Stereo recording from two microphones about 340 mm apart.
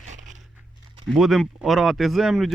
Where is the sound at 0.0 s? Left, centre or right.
Right.